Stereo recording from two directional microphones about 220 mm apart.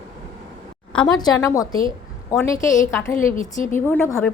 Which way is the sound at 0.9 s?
15° left (ahead or behind).